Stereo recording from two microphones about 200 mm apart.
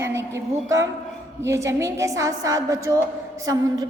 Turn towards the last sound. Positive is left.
turn(degrees=-15)  # may be behind; listen again after turning